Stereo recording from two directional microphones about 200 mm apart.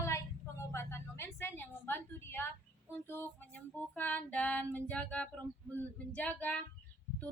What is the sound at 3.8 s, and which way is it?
Speech, 10° left (ahead or behind).